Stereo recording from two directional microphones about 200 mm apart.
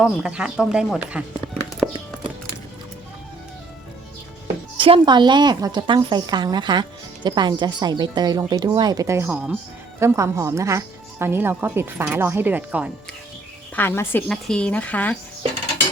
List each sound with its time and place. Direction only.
0.0 s speech: 5° right (ahead or behind)
1.8 s music: centre (ahead or behind)
4.8 s speech: 25° right (ahead or behind); by 12.9 s 10° right (ahead or behind)
13.7 s speech: 10° left (ahead or behind)